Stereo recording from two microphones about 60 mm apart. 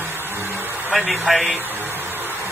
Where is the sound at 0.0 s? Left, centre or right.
Right.